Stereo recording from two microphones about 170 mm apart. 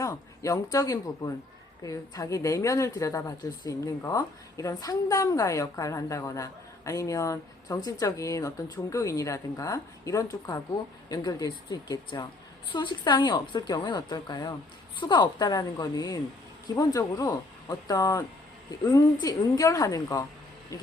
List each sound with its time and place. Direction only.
0.0 s a woman's voice: 20° left (ahead or behind)